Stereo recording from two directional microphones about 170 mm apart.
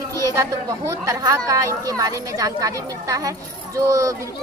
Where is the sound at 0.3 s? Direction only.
20° right (ahead or behind).